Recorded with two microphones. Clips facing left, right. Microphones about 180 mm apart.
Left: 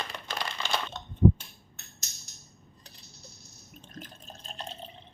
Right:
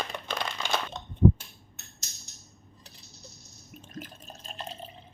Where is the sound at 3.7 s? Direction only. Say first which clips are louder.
Right 4 dB; 5° right (ahead or behind).